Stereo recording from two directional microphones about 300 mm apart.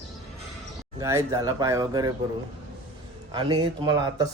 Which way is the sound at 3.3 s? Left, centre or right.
Centre.